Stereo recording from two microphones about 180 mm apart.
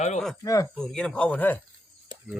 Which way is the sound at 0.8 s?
5° left (ahead or behind).